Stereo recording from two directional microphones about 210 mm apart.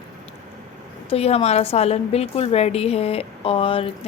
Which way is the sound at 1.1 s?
30° left (ahead or behind).